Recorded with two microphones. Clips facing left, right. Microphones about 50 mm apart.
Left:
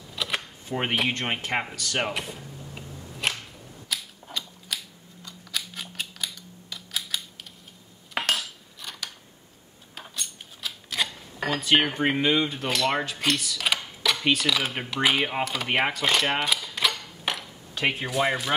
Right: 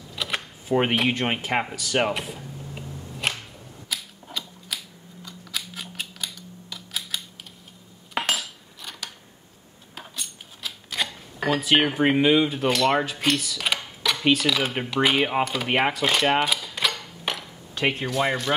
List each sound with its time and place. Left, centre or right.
0.1 s speech: centre
3.2 s a sound: centre
9.9 s speech: centre